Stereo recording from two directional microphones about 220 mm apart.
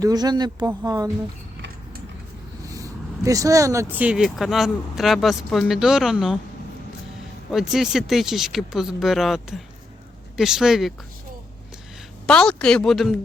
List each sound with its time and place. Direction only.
0.0 s speech: 15° right (ahead or behind)
2.6 s speech: 15° right (ahead or behind)
7.5 s speech: centre (ahead or behind)
12.2 s speech: 5° left (ahead or behind)